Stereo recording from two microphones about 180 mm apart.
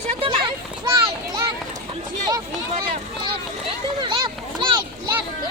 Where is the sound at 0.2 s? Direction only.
30° right (ahead or behind).